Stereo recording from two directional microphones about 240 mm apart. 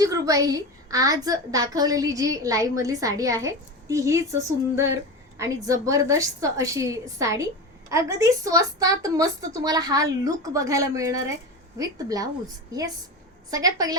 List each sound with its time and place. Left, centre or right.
0.0 s a woman's voice: centre